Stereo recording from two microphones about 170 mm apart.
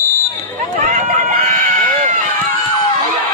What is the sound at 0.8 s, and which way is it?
Run, 50° right (ahead or behind).